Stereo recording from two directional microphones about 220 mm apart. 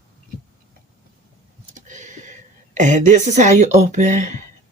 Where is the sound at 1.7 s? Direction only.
35° right (ahead or behind).